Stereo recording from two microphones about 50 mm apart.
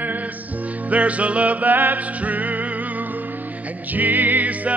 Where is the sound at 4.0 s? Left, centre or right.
Right.